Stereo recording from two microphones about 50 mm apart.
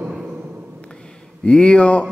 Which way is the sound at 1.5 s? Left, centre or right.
Centre.